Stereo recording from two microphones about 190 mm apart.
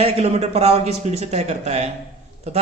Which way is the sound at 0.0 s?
35° right (ahead or behind).